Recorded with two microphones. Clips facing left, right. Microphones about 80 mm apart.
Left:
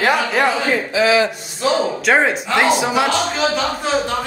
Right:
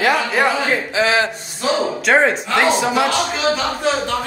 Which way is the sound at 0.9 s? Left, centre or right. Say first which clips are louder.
Left 3 dB; right.